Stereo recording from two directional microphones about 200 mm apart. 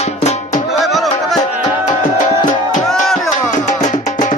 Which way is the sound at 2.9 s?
Centre (ahead or behind).